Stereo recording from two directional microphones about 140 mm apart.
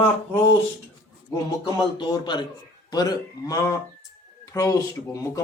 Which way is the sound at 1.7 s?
30° left (ahead or behind).